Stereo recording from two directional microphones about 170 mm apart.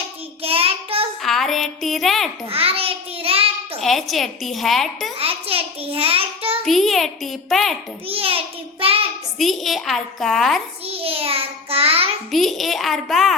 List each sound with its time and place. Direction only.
0.4 s child singing: 35° right (ahead or behind)
1.2 s a woman's voice: centre (ahead or behind)
2.5 s child singing: 35° right (ahead or behind)
3.8 s a woman's voice: centre (ahead or behind)
5.1 s child singing: 35° right (ahead or behind)
6.7 s a woman's voice: centre (ahead or behind)
8.0 s child singing: 35° right (ahead or behind)
9.4 s a woman's voice: centre (ahead or behind)
10.8 s child singing: 35° right (ahead or behind)
12.3 s a woman's voice: centre (ahead or behind)